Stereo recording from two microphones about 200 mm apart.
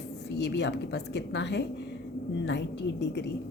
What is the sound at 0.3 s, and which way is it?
A woman's voice, 60° left (ahead or behind).